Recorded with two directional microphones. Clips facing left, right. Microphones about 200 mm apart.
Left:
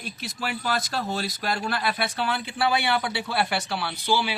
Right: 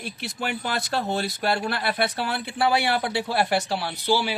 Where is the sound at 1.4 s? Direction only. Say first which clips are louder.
Right 2 dB; 45° right (ahead or behind).